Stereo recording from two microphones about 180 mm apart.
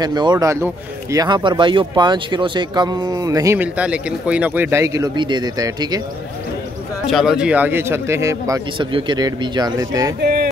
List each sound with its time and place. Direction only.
0.0 s speech: 25° right (ahead or behind)
7.1 s a man's voice: centre (ahead or behind); by 10.1 s 20° right (ahead or behind)